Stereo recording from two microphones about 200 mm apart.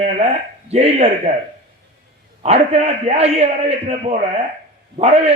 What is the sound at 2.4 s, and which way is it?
A man's voice, 30° right (ahead or behind).